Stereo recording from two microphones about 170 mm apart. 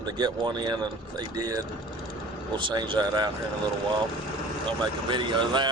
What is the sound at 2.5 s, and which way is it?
Speech, 25° right (ahead or behind).